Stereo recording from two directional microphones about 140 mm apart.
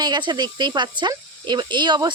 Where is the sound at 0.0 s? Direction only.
30° right (ahead or behind).